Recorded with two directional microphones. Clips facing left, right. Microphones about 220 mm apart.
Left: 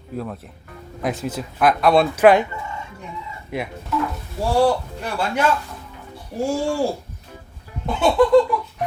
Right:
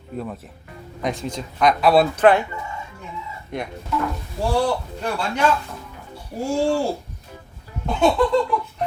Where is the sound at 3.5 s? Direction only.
5° left (ahead or behind).